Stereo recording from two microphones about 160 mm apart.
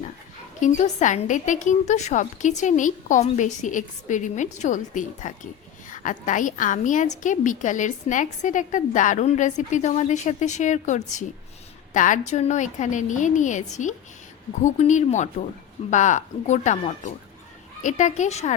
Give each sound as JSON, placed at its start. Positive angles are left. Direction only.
{"t": 0.6, "sound": "a woman's voice", "side_deg": 50}